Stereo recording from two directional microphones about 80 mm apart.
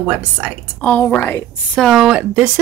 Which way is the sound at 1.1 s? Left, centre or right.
Left.